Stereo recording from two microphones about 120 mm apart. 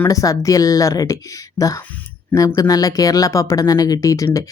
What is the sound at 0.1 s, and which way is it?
Speech, 30° left (ahead or behind).